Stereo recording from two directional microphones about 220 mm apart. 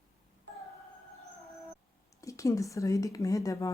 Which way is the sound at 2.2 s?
15° left (ahead or behind).